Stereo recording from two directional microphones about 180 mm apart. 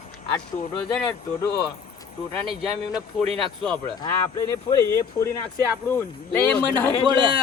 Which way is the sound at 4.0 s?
20° left (ahead or behind).